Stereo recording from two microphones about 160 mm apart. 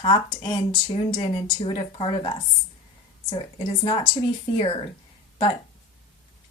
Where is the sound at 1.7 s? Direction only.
35° left (ahead or behind).